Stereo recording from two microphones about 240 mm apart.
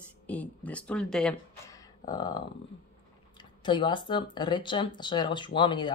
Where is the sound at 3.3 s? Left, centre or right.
Centre.